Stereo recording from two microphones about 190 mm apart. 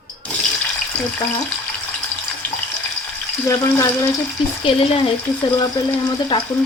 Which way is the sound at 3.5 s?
15° left (ahead or behind).